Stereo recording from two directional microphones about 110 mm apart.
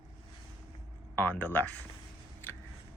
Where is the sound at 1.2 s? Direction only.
15° left (ahead or behind).